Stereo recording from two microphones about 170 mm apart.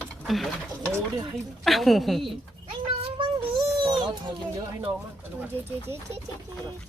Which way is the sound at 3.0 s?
30° right (ahead or behind).